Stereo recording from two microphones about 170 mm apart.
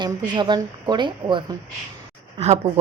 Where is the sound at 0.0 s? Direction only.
25° right (ahead or behind).